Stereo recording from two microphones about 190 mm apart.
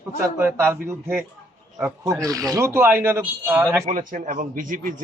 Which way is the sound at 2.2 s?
20° right (ahead or behind).